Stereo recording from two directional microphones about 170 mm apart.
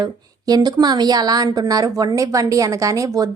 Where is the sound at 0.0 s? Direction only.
25° right (ahead or behind).